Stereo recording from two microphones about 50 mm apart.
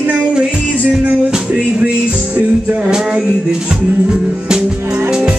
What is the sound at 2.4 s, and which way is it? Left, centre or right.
Music, right.